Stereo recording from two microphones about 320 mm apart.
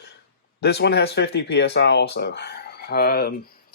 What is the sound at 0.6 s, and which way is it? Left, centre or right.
Speech, left.